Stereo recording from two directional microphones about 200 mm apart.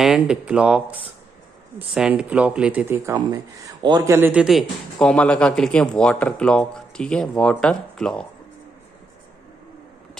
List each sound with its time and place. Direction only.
0.0 s a man's voice: 5° right (ahead or behind)